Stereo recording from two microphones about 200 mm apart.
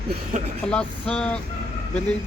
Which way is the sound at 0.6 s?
5° left (ahead or behind).